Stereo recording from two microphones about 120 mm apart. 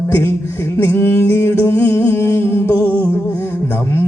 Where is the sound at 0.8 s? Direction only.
25° left (ahead or behind).